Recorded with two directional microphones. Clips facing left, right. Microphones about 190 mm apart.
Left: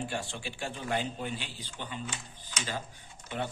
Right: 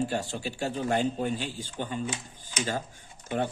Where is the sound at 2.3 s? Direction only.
45° right (ahead or behind).